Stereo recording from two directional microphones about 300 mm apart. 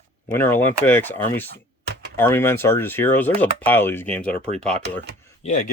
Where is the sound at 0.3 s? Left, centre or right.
Centre.